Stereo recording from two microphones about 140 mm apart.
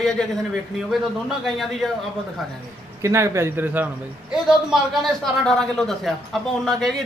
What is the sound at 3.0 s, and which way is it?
Speech, 20° right (ahead or behind).